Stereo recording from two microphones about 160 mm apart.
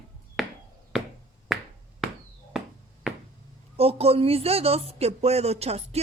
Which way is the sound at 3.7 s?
40° right (ahead or behind).